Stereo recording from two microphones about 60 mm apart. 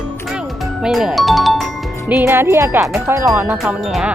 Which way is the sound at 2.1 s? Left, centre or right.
Right.